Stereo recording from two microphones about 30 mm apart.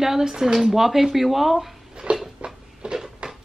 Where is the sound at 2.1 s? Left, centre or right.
Right.